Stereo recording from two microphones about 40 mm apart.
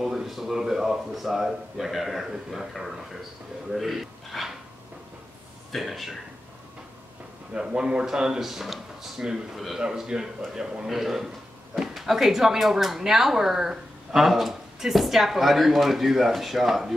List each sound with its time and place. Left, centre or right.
0.0 s a man's voice: centre
5.8 s speech: centre
7.5 s a man's voice: right; by 16.9 s centre